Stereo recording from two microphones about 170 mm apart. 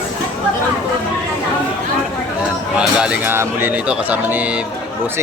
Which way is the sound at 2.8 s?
5° right (ahead or behind).